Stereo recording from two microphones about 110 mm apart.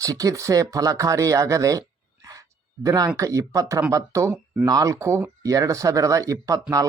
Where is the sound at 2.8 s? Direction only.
35° right (ahead or behind).